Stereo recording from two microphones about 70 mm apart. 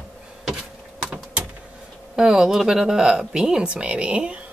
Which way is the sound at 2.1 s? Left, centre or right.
Centre.